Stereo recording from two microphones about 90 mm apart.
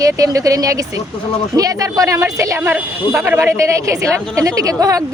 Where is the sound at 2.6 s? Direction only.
25° right (ahead or behind).